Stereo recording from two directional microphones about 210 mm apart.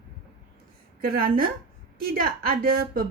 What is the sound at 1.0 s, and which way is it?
A woman's voice, 45° right (ahead or behind).